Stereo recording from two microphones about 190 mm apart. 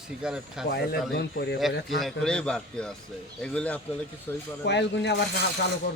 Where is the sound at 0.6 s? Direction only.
55° left (ahead or behind).